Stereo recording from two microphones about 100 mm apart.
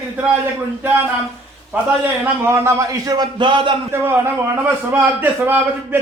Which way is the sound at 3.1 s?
50° right (ahead or behind).